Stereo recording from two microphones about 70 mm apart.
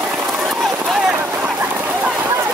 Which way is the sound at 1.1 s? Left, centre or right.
Right.